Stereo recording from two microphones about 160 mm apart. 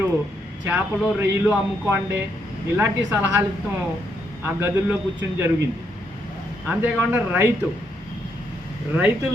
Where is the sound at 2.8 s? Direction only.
15° right (ahead or behind).